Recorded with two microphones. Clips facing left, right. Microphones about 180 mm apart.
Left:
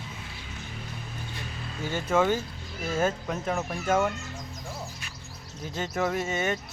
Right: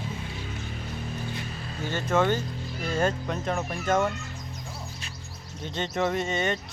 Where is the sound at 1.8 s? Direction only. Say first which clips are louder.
Even; 10° left (ahead or behind).